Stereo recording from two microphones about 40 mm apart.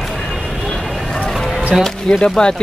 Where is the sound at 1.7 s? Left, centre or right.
Right.